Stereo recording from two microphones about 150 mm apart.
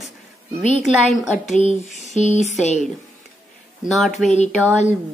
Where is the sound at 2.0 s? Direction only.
50° left (ahead or behind).